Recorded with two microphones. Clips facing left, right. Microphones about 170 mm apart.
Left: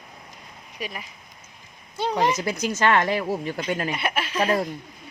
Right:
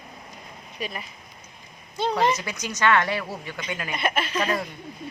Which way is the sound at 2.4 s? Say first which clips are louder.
Left 4 dB; 30° left (ahead or behind).